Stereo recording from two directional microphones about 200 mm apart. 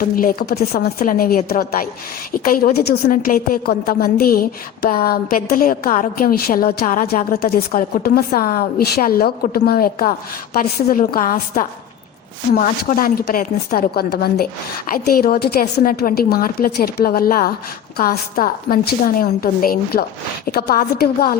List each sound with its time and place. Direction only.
0.2 s a woman's voice: 45° left (ahead or behind)